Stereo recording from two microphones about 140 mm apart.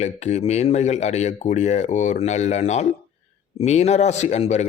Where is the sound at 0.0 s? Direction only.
55° left (ahead or behind).